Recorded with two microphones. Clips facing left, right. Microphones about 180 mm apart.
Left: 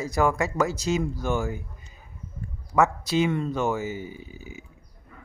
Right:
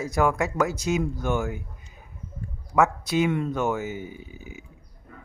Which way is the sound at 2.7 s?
5° right (ahead or behind).